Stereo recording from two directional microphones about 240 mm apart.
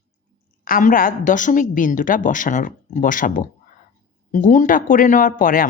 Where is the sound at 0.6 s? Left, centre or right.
Left.